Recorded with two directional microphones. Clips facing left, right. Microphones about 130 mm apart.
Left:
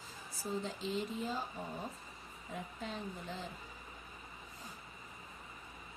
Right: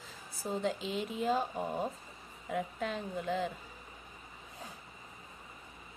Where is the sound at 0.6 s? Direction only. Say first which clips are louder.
Right 4 dB; 70° right (ahead or behind).